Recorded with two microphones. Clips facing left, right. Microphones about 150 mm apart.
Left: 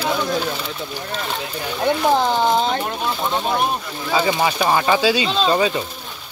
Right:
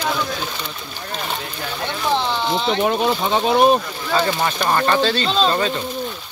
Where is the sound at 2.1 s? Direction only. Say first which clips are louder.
Left 2 dB; 45° left (ahead or behind).